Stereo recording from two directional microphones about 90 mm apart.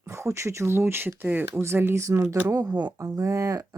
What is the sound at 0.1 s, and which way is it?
Speech, 30° right (ahead or behind).